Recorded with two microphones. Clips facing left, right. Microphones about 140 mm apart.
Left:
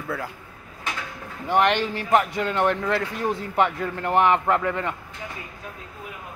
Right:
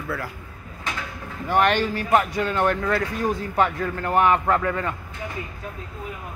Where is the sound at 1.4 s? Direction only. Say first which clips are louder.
Right 1 dB; 20° left (ahead or behind).